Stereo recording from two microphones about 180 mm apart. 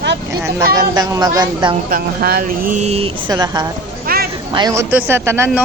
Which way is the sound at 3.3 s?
20° right (ahead or behind).